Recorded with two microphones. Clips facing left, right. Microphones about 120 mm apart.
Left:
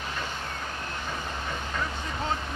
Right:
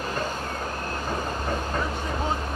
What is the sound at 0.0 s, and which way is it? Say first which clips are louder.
Vehicle: right 5 dB; 40° right (ahead or behind).